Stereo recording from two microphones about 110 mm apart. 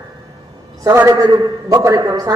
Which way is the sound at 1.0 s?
30° right (ahead or behind).